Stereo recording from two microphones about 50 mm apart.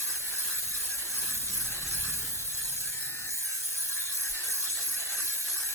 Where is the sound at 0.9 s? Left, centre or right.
Left.